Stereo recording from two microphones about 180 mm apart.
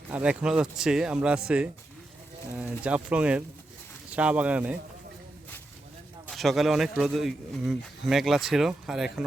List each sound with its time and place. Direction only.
0.1 s speech: 5° right (ahead or behind)
6.2 s speech: centre (ahead or behind)